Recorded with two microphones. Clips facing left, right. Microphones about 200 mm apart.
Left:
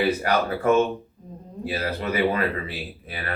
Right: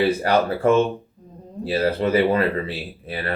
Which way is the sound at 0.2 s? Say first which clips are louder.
Right 4 dB; 30° right (ahead or behind).